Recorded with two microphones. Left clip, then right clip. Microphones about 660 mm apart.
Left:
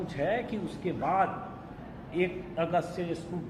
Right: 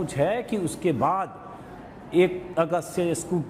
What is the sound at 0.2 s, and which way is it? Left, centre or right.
A man's voice, right.